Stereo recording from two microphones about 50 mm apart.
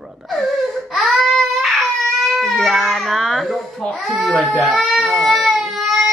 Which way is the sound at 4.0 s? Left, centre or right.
Centre.